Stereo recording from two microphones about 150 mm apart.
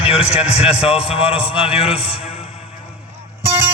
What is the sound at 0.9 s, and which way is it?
A man's voice, 40° left (ahead or behind).